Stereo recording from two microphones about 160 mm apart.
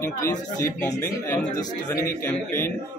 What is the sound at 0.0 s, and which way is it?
Speech, 15° left (ahead or behind).